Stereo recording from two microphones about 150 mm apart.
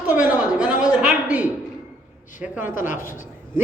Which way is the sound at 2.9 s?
60° left (ahead or behind).